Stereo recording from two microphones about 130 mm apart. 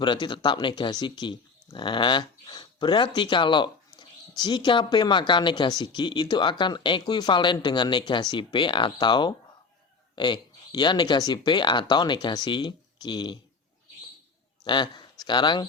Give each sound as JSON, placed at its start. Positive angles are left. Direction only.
{"t": 0.0, "sound": "speech", "side_deg": 35}
{"t": 14.6, "sound": "speech", "side_deg": 35}